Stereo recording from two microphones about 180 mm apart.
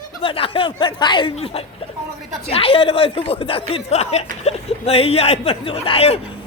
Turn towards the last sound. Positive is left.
turn(degrees=30)  # may be behind; listen again after turning